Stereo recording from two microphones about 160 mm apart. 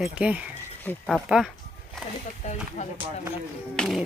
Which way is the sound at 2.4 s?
45° left (ahead or behind).